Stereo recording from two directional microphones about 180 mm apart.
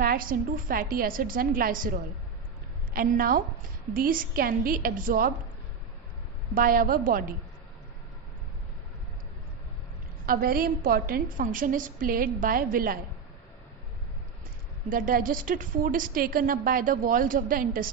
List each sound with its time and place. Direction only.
0.0 s a woman's voice: 50° right (ahead or behind)
6.5 s a woman's voice: 50° right (ahead or behind)
10.2 s a woman's voice: 55° right (ahead or behind)
14.9 s a woman's voice: 50° right (ahead or behind)